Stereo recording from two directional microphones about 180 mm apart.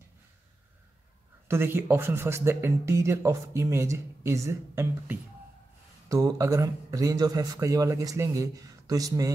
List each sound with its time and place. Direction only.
1.5 s speech: 15° right (ahead or behind)